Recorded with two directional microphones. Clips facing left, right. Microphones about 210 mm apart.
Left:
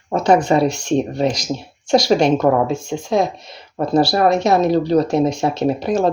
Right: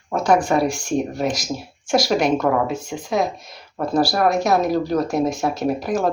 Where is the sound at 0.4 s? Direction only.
25° left (ahead or behind).